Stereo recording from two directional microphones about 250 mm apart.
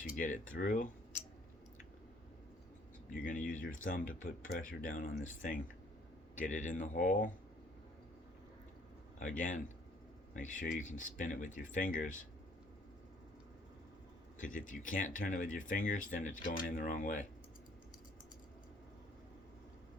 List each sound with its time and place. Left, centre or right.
0.0 s speech: left
3.1 s speech: left
9.1 s speech: left
14.3 s speech: left